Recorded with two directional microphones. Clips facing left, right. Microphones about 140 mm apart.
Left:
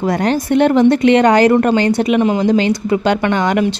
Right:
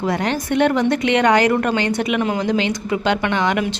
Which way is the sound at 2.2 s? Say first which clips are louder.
Left 6 dB; 20° left (ahead or behind).